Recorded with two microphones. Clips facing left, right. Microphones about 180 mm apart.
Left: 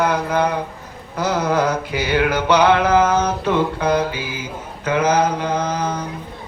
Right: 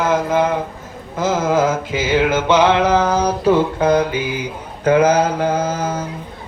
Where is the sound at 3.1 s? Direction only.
35° right (ahead or behind).